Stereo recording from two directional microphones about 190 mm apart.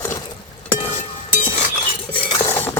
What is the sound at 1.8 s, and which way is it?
Cutlery, 30° left (ahead or behind).